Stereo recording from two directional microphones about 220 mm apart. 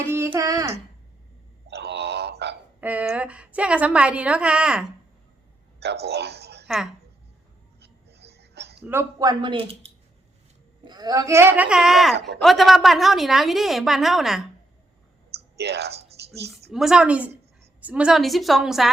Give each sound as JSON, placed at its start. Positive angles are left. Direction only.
{"t": 0.1, "sound": "speech", "side_deg": -10}
{"t": 1.6, "sound": "wail", "side_deg": -50}
{"t": 2.8, "sound": "a woman's voice", "side_deg": -5}
{"t": 5.8, "sound": "speech", "side_deg": -50}
{"t": 7.8, "sound": "a sound", "side_deg": -50}
{"t": 8.8, "sound": "speech", "side_deg": -10}
{"t": 12.1, "sound": "speech", "side_deg": -50}
{"t": 12.4, "sound": "a woman's voice", "side_deg": 0}
{"t": 15.5, "sound": "speech", "side_deg": -50}
{"t": 16.2, "sound": "a sound", "side_deg": -50}
{"t": 16.7, "sound": "a woman's voice", "side_deg": 0}